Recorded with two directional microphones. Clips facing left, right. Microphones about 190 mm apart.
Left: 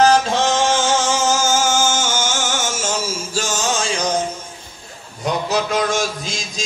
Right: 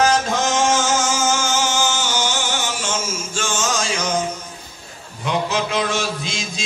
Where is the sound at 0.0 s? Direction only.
35° left (ahead or behind).